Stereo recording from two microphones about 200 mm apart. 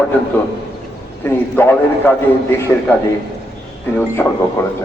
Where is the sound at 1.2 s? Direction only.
10° left (ahead or behind).